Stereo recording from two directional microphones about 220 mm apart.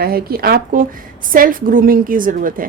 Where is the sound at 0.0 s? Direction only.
45° right (ahead or behind).